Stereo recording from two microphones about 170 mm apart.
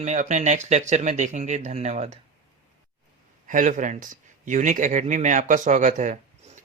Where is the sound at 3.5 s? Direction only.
50° right (ahead or behind).